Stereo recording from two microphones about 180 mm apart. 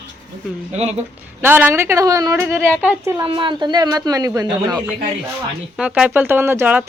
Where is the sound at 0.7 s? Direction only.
40° right (ahead or behind).